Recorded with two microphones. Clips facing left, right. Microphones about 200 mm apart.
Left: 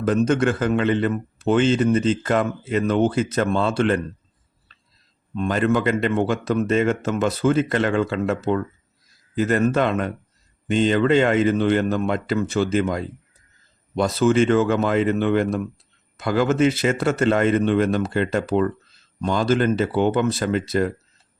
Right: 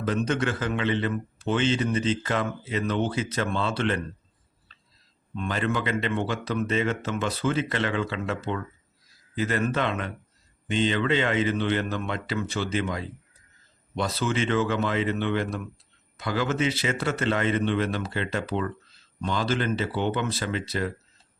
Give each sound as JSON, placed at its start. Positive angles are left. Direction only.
{"t": 0.0, "sound": "a man's voice", "side_deg": 50}
{"t": 5.4, "sound": "a man's voice", "side_deg": 45}